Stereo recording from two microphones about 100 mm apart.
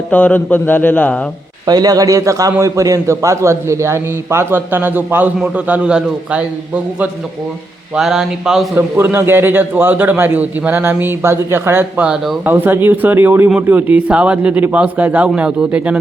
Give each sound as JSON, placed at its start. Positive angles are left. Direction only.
{"t": 0.1, "sound": "speech", "side_deg": 15}
{"t": 1.6, "sound": "a man's voice", "side_deg": -40}
{"t": 7.9, "sound": "a sound", "side_deg": -5}
{"t": 8.7, "sound": "a man's voice", "side_deg": -25}
{"t": 12.0, "sound": "a sound", "side_deg": -5}
{"t": 12.5, "sound": "a man's voice", "side_deg": -20}